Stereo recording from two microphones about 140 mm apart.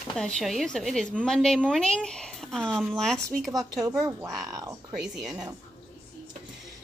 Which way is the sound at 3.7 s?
30° right (ahead or behind).